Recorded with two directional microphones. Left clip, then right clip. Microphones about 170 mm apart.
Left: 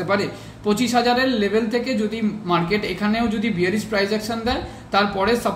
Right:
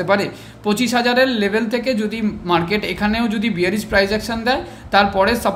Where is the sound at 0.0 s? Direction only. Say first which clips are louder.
Right 4 dB; 45° right (ahead or behind).